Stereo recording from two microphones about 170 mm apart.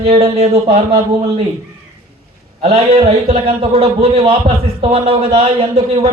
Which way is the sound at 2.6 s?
35° right (ahead or behind).